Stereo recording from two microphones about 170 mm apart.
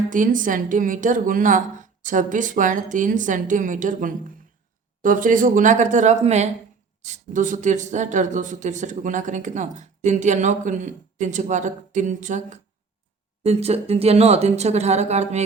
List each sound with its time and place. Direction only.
0.1 s speech: 50° right (ahead or behind)